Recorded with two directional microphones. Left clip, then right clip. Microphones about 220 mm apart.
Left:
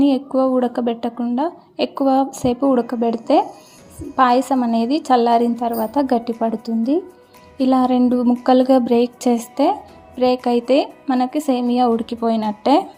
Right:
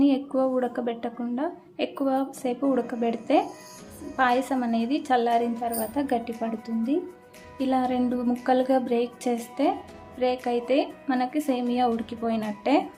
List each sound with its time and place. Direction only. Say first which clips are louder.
0.0 s a woman's voice: left 6 dB; 20° left (ahead or behind)